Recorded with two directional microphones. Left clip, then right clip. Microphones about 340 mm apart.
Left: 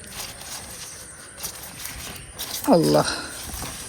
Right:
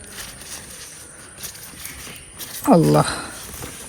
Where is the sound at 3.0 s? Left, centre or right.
Centre.